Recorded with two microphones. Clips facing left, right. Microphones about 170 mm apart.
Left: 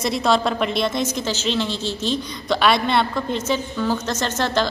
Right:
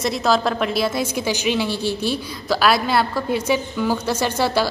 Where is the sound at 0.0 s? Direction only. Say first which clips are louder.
Even; centre (ahead or behind).